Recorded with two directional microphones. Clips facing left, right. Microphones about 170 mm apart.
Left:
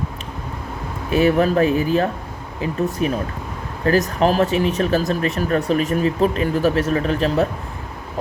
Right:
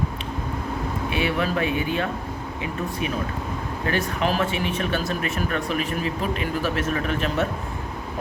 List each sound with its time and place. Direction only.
1.1 s speech: 40° left (ahead or behind)